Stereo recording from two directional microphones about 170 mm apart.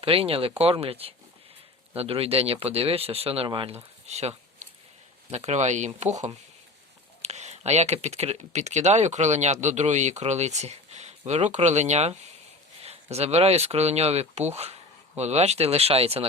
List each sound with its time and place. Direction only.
0.0 s speech: 35° right (ahead or behind)